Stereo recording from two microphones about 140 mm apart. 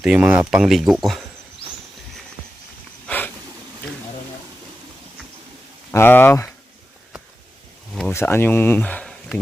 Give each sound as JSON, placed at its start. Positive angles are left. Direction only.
{"t": 0.0, "sound": "speech", "side_deg": -10}
{"t": 3.1, "sound": "a sound", "side_deg": 15}
{"t": 5.9, "sound": "speech", "side_deg": 15}
{"t": 8.1, "sound": "speech", "side_deg": 15}